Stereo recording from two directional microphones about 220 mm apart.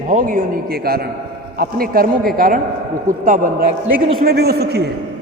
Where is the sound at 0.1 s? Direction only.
40° right (ahead or behind).